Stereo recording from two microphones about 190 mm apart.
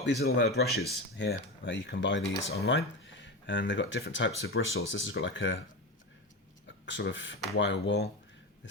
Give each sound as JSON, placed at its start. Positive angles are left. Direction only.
{"t": 0.0, "sound": "speech", "side_deg": 60}
{"t": 1.2, "sound": "speech", "side_deg": 70}
{"t": 6.8, "sound": "speech", "side_deg": 75}